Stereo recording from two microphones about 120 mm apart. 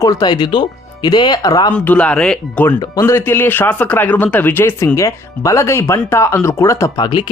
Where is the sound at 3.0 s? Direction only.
20° left (ahead or behind).